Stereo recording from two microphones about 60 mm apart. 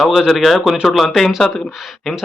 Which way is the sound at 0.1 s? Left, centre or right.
Centre.